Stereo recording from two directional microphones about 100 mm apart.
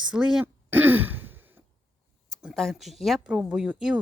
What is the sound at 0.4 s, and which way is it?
Throat clearing, 20° right (ahead or behind).